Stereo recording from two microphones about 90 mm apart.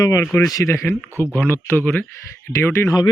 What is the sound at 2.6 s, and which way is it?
Speech, 30° left (ahead or behind).